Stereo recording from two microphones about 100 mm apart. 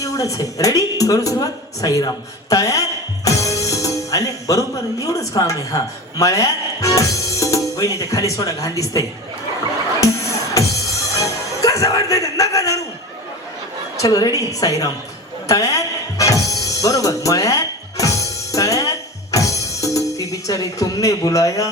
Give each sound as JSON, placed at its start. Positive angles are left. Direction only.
{"t": 0.0, "sound": "a woman's voice", "side_deg": 35}
{"t": 10.6, "sound": "music", "side_deg": 35}
{"t": 13.9, "sound": "a woman's voice", "side_deg": 35}
{"t": 15.4, "sound": "music", "side_deg": 35}